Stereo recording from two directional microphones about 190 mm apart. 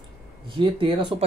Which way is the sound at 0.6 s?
25° right (ahead or behind).